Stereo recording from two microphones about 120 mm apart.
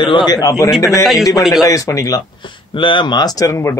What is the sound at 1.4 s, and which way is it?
Speech, centre (ahead or behind).